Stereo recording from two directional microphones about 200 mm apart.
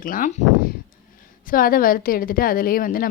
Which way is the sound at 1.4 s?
45° left (ahead or behind).